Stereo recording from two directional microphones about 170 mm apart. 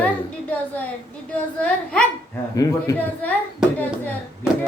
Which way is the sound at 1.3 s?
5° left (ahead or behind).